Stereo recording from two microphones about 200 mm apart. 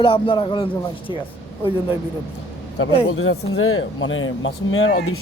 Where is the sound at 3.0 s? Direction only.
90° left.